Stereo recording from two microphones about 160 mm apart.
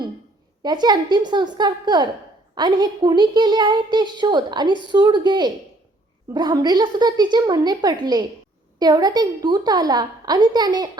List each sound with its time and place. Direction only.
0.6 s a woman's voice: 25° right (ahead or behind)